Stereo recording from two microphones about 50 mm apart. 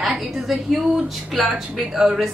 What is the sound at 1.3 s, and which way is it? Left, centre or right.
Speech, centre.